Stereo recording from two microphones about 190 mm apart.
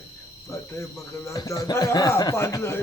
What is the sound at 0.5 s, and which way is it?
Speech, 15° left (ahead or behind).